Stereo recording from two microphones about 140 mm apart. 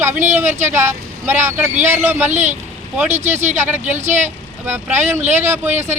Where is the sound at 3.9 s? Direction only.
55° right (ahead or behind).